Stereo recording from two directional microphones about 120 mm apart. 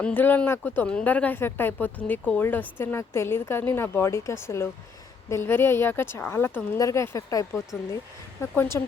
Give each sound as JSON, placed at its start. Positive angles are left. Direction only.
{"t": 0.0, "sound": "a woman's voice", "side_deg": 15}